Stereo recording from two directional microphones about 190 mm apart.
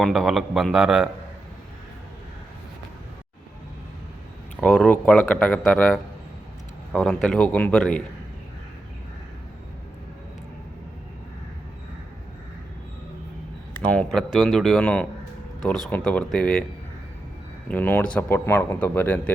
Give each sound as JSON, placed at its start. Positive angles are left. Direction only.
{"t": 0.0, "sound": "speech", "side_deg": 0}
{"t": 4.6, "sound": "speech", "side_deg": 5}
{"t": 13.9, "sound": "speech", "side_deg": 5}
{"t": 17.7, "sound": "speech", "side_deg": 10}